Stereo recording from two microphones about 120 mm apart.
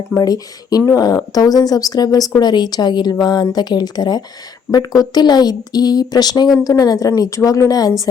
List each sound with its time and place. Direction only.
0.2 s speech: 30° left (ahead or behind)